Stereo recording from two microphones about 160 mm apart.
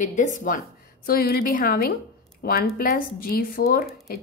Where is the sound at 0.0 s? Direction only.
50° left (ahead or behind).